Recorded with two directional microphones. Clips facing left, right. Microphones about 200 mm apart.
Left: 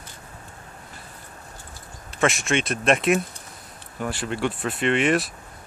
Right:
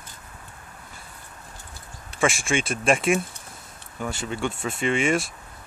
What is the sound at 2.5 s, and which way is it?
Speech, centre (ahead or behind).